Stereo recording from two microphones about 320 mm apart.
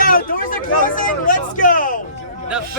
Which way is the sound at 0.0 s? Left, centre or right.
Left.